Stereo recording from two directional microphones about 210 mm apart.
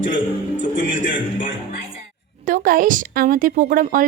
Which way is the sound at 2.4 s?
40° right (ahead or behind).